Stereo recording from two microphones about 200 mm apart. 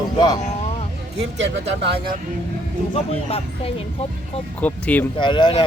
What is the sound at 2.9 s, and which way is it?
Speech, 30° left (ahead or behind).